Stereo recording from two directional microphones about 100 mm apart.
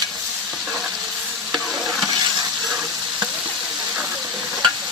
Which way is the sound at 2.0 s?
40° right (ahead or behind).